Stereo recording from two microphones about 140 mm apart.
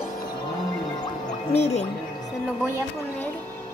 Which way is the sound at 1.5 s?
50° left (ahead or behind).